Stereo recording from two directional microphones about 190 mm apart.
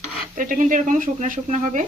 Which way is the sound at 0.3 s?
45° right (ahead or behind).